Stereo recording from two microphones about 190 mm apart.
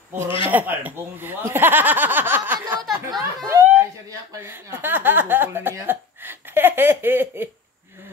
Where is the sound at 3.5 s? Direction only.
15° right (ahead or behind).